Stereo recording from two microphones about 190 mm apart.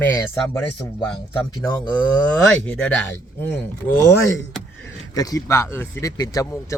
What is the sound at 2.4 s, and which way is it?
Speech, 5° left (ahead or behind).